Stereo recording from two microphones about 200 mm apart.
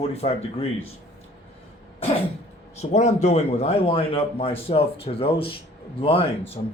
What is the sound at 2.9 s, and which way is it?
Speech, 35° left (ahead or behind).